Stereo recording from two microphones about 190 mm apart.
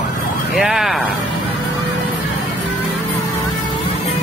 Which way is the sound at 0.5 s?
Centre (ahead or behind).